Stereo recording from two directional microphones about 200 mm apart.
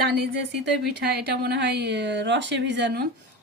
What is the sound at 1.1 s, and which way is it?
A woman's voice, 55° right (ahead or behind).